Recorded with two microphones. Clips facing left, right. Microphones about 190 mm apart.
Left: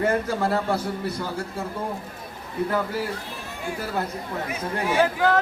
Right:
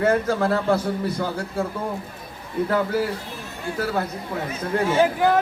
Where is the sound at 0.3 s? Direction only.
55° right (ahead or behind).